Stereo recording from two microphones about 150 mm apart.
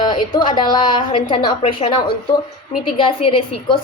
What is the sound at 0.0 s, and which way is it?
A woman's voice, 30° left (ahead or behind).